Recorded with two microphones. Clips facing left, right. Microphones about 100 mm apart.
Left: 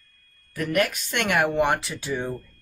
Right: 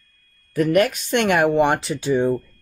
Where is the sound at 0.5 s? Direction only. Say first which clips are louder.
Right 7 dB; 30° right (ahead or behind).